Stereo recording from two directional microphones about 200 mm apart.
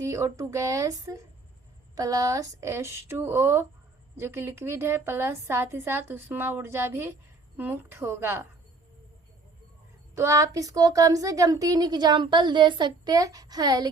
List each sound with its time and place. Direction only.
0.0 s a woman's voice: 15° right (ahead or behind)
10.2 s a woman's voice: 15° right (ahead or behind)